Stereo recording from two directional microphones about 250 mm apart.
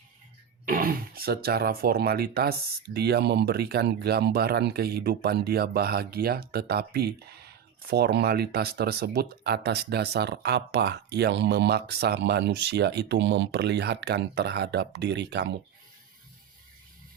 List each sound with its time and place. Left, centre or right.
0.6 s speech: right